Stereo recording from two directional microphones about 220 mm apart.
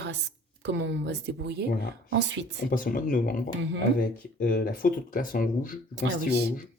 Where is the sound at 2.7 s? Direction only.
40° left (ahead or behind).